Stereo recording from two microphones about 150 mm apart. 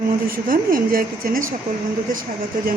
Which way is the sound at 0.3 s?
70° right (ahead or behind).